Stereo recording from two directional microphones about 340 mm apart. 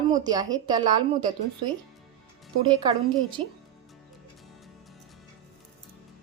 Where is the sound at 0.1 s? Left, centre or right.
Centre.